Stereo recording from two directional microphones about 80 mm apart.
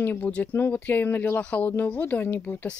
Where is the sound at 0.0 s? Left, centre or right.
Left.